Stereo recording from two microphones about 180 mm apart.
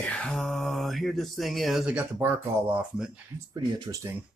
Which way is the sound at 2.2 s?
10° right (ahead or behind).